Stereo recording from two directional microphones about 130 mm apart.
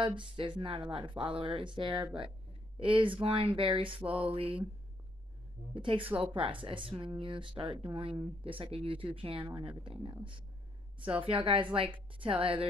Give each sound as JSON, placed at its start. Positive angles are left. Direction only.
{"t": 0.0, "sound": "a woman's voice", "side_deg": -40}
{"t": 4.0, "sound": "a sound", "side_deg": -10}
{"t": 4.4, "sound": "a woman's voice", "side_deg": -45}
{"t": 5.8, "sound": "a woman's voice", "side_deg": -40}